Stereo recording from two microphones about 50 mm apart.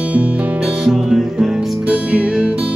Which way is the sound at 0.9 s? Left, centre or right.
Centre.